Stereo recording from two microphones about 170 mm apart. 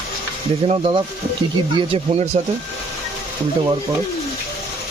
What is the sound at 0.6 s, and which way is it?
Speech, 35° right (ahead or behind).